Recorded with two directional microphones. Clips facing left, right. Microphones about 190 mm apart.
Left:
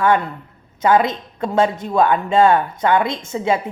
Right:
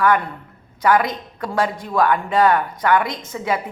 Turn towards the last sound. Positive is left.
turn(degrees=25)  # may be behind; listen again after turning